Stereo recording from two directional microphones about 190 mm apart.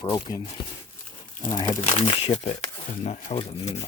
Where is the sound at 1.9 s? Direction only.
35° left (ahead or behind).